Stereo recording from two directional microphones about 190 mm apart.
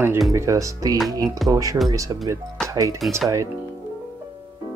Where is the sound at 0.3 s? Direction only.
15° right (ahead or behind).